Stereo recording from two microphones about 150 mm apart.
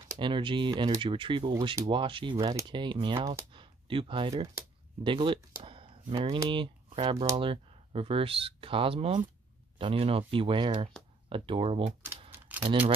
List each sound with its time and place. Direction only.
0.2 s speech: 35° right (ahead or behind)
3.2 s speech: 15° right (ahead or behind)
3.5 s speech: 35° right (ahead or behind)
12.3 s typewriter: 10° right (ahead or behind)
12.6 s speech: 40° right (ahead or behind)